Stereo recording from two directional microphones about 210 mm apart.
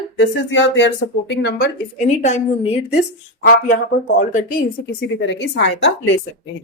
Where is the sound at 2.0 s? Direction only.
35° left (ahead or behind).